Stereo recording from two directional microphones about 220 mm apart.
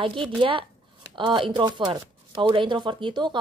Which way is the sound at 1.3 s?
20° right (ahead or behind).